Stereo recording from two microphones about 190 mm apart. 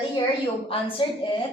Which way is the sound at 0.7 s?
30° left (ahead or behind).